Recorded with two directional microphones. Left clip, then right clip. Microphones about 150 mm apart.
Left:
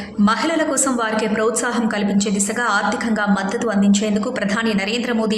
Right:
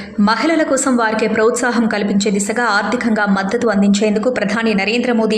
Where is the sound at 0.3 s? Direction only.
25° right (ahead or behind).